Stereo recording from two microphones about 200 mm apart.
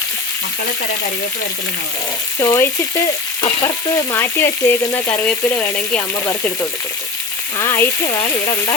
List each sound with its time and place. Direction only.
2.4 s frying: 15° left (ahead or behind)
7.6 s speech: 15° left (ahead or behind)